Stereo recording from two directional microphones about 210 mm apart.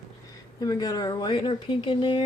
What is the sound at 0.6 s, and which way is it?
Speech, 15° left (ahead or behind).